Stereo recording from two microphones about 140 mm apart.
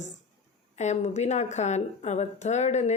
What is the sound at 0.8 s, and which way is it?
A woman's voice, 55° left (ahead or behind).